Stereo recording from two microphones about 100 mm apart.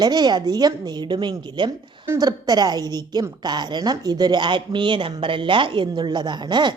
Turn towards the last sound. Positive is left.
turn(degrees=-50)  # may be behind; listen again after turning